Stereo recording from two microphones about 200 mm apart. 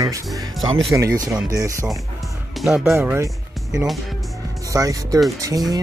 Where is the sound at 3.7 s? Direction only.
Centre (ahead or behind).